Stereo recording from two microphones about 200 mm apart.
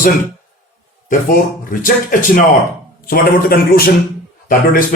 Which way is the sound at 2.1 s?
40° left (ahead or behind).